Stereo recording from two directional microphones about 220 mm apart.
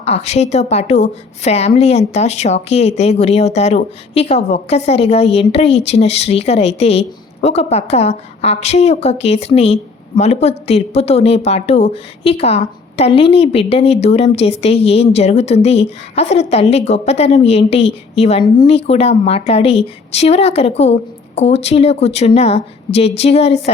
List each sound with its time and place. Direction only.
0.0 s a woman's voice: 30° left (ahead or behind)